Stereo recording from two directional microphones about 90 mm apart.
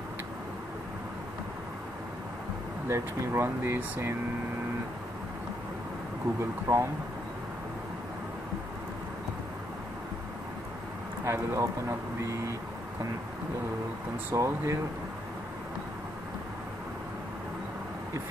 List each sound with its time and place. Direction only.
2.9 s speech: 25° right (ahead or behind)
6.7 s speech: 35° right (ahead or behind)
11.2 s speech: 30° right (ahead or behind)
14.3 s speech: 35° right (ahead or behind)